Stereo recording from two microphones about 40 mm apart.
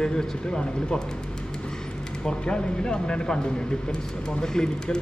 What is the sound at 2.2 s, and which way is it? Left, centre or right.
Speech, left.